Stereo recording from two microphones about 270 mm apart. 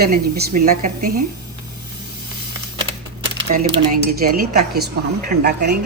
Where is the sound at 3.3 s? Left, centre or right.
Right.